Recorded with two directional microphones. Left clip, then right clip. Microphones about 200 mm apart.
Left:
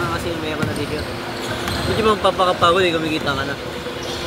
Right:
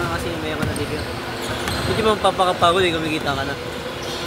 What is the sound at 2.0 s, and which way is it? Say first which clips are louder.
Speech: left 1 dB; 10° right (ahead or behind).